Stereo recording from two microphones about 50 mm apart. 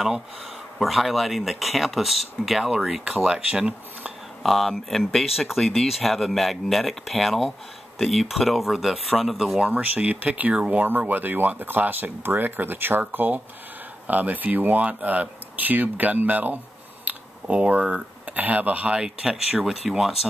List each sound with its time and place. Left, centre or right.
0.7 s speech: centre; by 4.1 s right
4.4 s speech: centre
9.7 s speech: right
10.9 s speech: right
17.0 s a sound: right
18.2 s speech: right
18.9 s speech: centre